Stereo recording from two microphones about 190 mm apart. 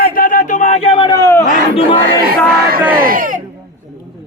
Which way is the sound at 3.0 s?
45° right (ahead or behind).